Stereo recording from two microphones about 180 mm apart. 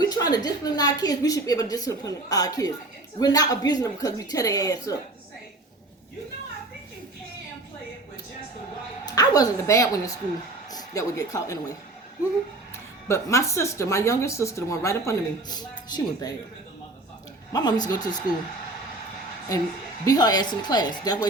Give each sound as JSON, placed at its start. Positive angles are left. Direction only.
{"t": 0.1, "sound": "a woman's voice", "side_deg": 20}
{"t": 9.0, "sound": "a woman's voice", "side_deg": 20}
{"t": 13.1, "sound": "speech", "side_deg": 15}
{"t": 17.5, "sound": "a woman's voice", "side_deg": 25}
{"t": 20.1, "sound": "a woman's voice", "side_deg": 20}